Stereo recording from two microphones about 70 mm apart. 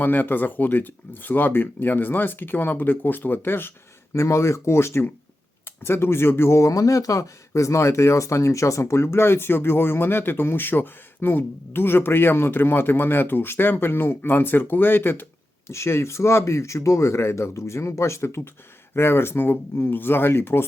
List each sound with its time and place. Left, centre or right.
0.0 s speech: left
4.1 s speech: left